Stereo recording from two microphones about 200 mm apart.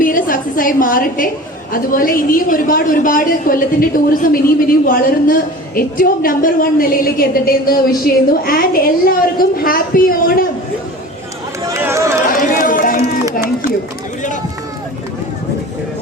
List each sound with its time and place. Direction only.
0.0 s a sound: 45° left (ahead or behind)
1.7 s a man's voice: 45° left (ahead or behind)
11.7 s speech: 15° right (ahead or behind)
12.3 s run: 45° left (ahead or behind)